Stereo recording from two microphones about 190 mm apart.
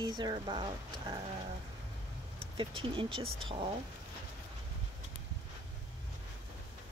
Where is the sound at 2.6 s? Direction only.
25° right (ahead or behind).